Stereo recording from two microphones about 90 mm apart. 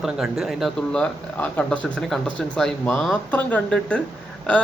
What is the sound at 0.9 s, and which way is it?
Speech, 15° left (ahead or behind).